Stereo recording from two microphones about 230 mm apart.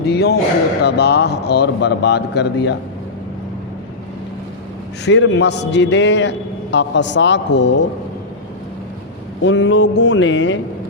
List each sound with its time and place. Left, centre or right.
0.0 s a man's voice: left
5.0 s a man's voice: left
9.4 s a man's voice: left